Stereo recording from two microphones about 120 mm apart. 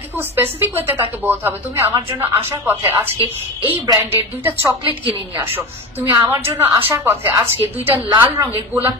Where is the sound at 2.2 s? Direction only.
20° right (ahead or behind).